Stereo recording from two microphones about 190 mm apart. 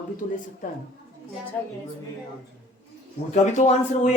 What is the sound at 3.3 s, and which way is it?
Speech, 40° left (ahead or behind).